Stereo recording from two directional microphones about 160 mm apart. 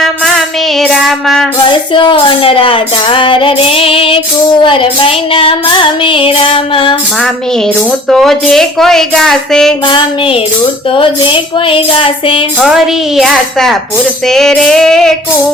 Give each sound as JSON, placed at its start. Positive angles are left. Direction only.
{"t": 0.8, "sound": "child singing", "side_deg": 0}
{"t": 1.9, "sound": "female singing", "side_deg": 30}
{"t": 7.9, "sound": "speech", "side_deg": 0}
{"t": 9.8, "sound": "female singing", "side_deg": 35}
{"t": 12.6, "sound": "speech", "side_deg": 0}